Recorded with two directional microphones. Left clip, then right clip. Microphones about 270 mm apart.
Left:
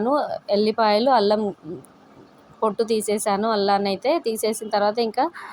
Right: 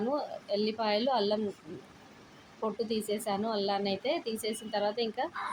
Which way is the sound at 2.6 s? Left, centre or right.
Left.